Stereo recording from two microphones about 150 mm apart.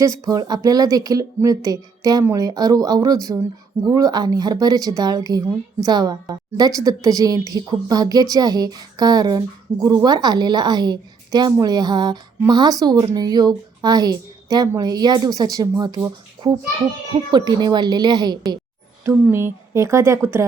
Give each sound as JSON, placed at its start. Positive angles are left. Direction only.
{"t": 0.0, "sound": "a woman's voice", "side_deg": -25}
{"t": 17.3, "sound": "a woman's voice", "side_deg": -30}
{"t": 19.0, "sound": "speech", "side_deg": -15}